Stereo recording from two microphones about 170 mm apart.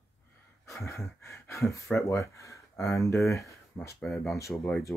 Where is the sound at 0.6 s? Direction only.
15° left (ahead or behind).